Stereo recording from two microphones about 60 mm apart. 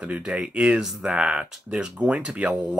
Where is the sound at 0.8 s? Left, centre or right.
Centre.